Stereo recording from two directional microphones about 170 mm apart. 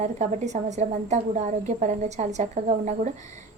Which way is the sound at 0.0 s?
40° right (ahead or behind).